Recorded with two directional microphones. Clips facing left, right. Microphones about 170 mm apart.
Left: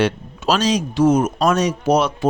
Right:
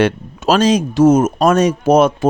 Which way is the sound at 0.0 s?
50° right (ahead or behind).